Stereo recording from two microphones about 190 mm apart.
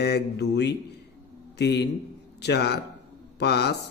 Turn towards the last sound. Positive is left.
turn(degrees=60)  # may be behind; listen again after turning